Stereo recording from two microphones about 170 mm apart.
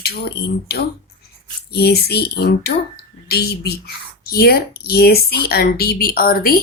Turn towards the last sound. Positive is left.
turn(degrees=60)  # may be behind; listen again after turning